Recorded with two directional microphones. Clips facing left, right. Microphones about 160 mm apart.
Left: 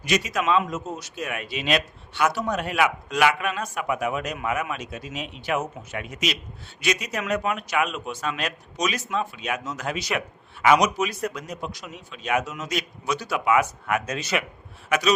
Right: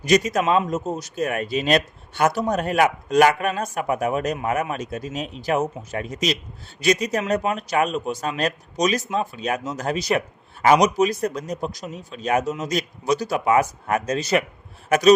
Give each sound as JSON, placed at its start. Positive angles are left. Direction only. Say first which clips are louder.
{"t": 0.0, "sound": "a man's voice", "louder": "right 6 dB", "side_deg": -40}